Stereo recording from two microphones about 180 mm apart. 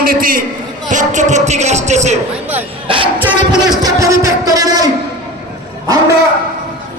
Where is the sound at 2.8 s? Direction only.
30° right (ahead or behind).